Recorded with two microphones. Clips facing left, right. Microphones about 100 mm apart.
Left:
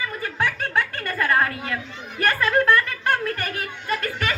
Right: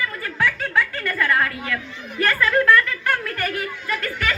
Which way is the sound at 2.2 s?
20° left (ahead or behind).